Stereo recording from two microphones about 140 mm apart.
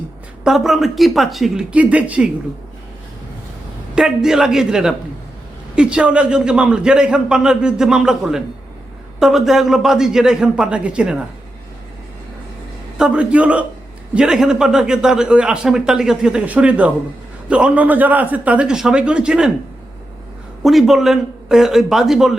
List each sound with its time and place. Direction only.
0.4 s a man's voice: centre (ahead or behind)
3.9 s a man's voice: 5° right (ahead or behind)
13.0 s a man's voice: 10° right (ahead or behind)
20.7 s a man's voice: centre (ahead or behind)